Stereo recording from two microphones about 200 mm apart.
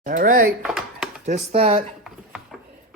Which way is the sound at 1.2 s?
35° right (ahead or behind).